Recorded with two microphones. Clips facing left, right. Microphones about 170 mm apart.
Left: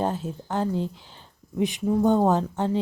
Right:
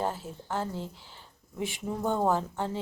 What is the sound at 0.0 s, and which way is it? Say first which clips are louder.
A woman's voice: left 5 dB; 20° left (ahead or behind).